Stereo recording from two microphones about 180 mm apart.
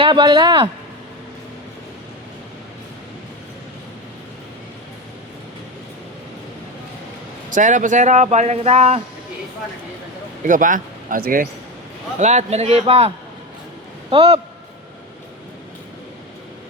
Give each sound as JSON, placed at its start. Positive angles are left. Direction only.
{"t": 0.0, "sound": "speech", "side_deg": -25}
{"t": 7.5, "sound": "speech", "side_deg": -45}
{"t": 10.4, "sound": "speech", "side_deg": -45}